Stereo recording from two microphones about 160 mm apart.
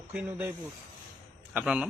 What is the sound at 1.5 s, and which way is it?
Speech, 5° right (ahead or behind).